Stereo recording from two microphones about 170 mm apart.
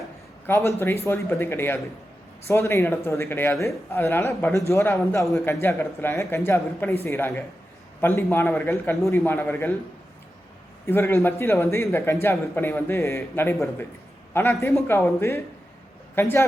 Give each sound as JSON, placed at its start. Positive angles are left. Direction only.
{"t": 0.4, "sound": "a man's voice", "side_deg": 15}
{"t": 10.8, "sound": "a man's voice", "side_deg": 15}